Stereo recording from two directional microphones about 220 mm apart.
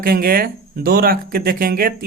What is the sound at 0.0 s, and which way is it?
A man's voice, 40° right (ahead or behind).